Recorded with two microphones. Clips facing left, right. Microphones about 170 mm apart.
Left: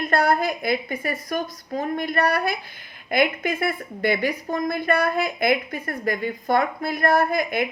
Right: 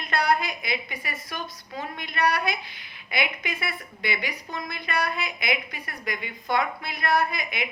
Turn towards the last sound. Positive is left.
turn(degrees=50)  # may be behind; listen again after turning